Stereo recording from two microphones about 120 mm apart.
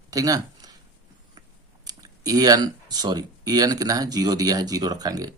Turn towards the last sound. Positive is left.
turn(degrees=-35)  # may be behind; listen again after turning